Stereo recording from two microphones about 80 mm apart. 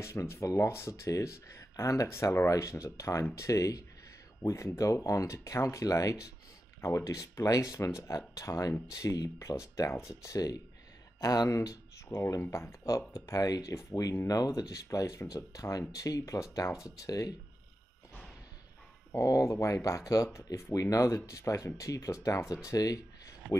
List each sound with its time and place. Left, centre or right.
0.0 s speech: left
12.1 s speech: left
19.1 s speech: left
22.7 s a sound: left